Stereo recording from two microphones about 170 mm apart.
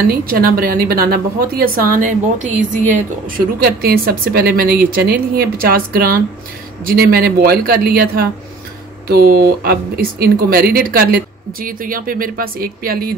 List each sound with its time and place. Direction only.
0.0 s a woman's voice: 60° right (ahead or behind)
3.3 s a woman's voice: 60° right (ahead or behind)